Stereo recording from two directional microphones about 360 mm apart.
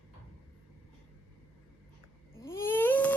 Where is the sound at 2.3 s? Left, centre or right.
Centre.